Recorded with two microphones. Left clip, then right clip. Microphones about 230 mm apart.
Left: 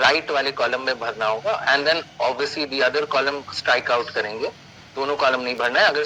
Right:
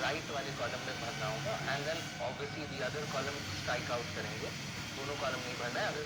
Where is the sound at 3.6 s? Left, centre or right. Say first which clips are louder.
Left 18 dB; left.